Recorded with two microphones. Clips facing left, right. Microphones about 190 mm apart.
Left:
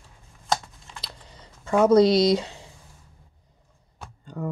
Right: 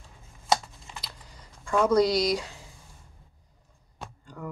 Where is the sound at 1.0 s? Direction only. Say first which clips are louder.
Left 3 dB; 25° left (ahead or behind).